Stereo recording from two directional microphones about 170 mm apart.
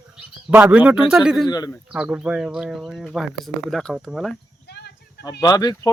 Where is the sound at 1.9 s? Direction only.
5° right (ahead or behind).